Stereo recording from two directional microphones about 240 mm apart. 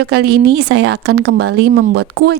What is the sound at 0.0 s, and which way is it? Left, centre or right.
A woman's voice, right.